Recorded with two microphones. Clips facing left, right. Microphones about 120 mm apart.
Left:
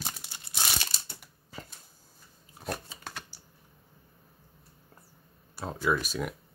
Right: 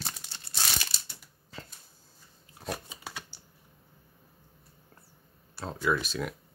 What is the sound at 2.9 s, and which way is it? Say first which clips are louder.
Shuffling cards: even; 10° right (ahead or behind).